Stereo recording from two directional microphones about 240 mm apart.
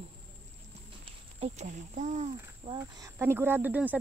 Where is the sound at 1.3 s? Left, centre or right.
Right.